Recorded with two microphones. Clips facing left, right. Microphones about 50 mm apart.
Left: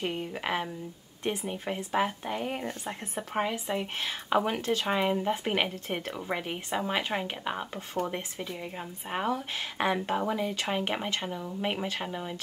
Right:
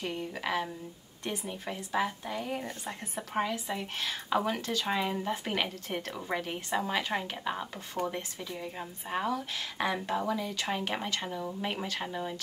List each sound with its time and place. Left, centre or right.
0.0 s speech: left
6.1 s speech: centre